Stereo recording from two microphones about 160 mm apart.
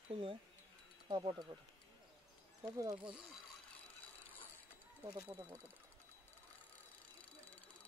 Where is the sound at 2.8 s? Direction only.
25° right (ahead or behind).